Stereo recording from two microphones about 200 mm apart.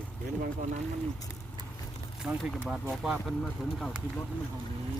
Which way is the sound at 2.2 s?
5° right (ahead or behind).